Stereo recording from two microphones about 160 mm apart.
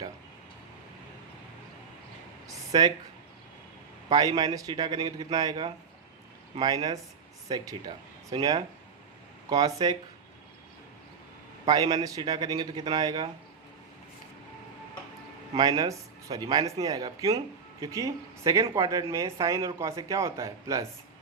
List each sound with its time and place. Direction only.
2.5 s speech: 25° right (ahead or behind)
4.1 s speech: 25° right (ahead or behind)
11.6 s speech: 25° right (ahead or behind)
15.5 s speech: 25° right (ahead or behind)